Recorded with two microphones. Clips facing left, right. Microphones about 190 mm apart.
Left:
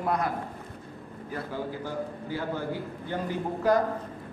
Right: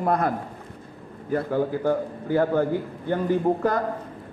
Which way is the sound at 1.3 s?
55° right (ahead or behind).